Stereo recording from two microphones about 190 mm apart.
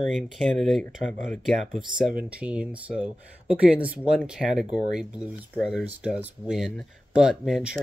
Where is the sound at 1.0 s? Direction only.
40° right (ahead or behind).